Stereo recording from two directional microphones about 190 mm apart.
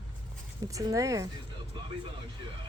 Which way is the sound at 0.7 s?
15° right (ahead or behind).